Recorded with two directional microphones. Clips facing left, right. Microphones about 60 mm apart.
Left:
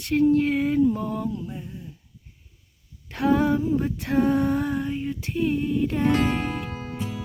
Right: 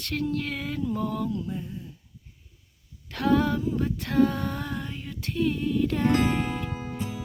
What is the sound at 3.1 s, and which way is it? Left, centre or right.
Female singing, centre.